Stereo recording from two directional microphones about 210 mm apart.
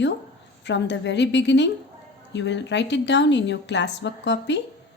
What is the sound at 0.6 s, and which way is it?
A woman's voice, 55° left (ahead or behind).